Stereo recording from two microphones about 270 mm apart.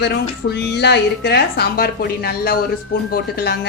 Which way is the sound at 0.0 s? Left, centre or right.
Left.